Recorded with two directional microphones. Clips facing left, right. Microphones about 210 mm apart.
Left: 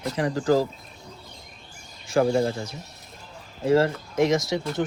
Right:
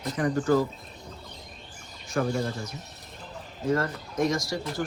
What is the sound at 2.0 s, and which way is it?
Speech, 90° left.